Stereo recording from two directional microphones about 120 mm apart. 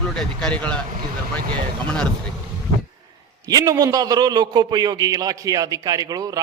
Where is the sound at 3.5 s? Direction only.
35° right (ahead or behind).